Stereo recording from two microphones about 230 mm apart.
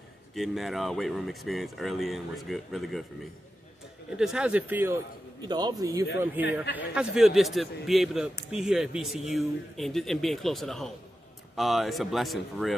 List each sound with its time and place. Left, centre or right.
0.3 s speech: centre
4.2 s a man's voice: centre